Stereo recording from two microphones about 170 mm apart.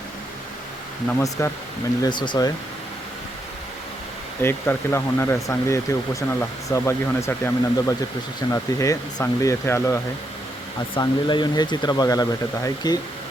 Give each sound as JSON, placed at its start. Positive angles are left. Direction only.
{"t": 1.4, "sound": "speech", "side_deg": 15}
{"t": 2.0, "sound": "speech", "side_deg": 25}
{"t": 4.4, "sound": "speech", "side_deg": 15}
{"t": 10.9, "sound": "speech", "side_deg": 25}